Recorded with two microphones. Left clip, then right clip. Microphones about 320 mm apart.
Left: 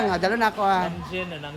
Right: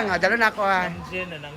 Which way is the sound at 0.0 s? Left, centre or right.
Centre.